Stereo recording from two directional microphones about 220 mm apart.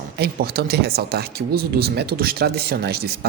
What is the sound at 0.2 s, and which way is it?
Speech, 45° right (ahead or behind).